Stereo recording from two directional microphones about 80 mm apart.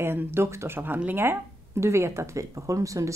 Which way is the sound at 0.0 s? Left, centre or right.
Right.